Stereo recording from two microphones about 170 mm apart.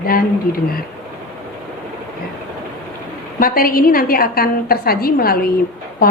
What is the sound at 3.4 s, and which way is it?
A woman's voice, 55° left (ahead or behind).